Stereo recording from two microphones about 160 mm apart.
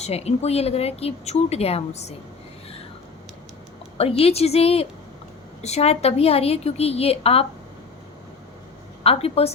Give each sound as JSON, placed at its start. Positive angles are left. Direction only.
{"t": 0.0, "sound": "a woman's voice", "side_deg": 40}
{"t": 4.2, "sound": "a woman's voice", "side_deg": 40}
{"t": 9.0, "sound": "a woman's voice", "side_deg": 40}